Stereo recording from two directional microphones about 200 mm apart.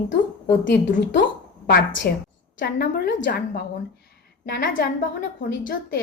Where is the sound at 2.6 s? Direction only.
50° left (ahead or behind).